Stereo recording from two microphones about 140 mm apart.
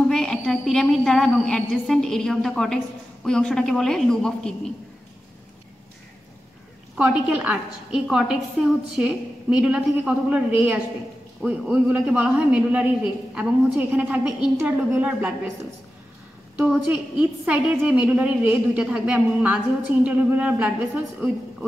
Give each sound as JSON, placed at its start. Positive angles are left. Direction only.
{"t": 0.1, "sound": "a woman's voice", "side_deg": 5}
{"t": 7.0, "sound": "a woman's voice", "side_deg": -10}
{"t": 16.5, "sound": "a man's voice", "side_deg": -5}